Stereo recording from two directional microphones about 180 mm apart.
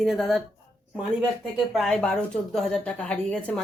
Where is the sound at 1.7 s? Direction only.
Centre (ahead or behind).